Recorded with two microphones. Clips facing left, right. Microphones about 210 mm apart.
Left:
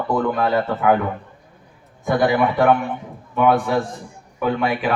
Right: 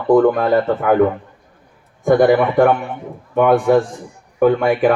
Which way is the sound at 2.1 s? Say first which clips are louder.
Right 6 dB; 50° right (ahead or behind).